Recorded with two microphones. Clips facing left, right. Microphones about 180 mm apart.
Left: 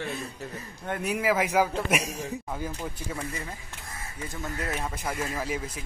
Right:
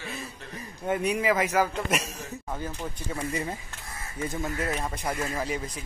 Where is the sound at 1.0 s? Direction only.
5° left (ahead or behind).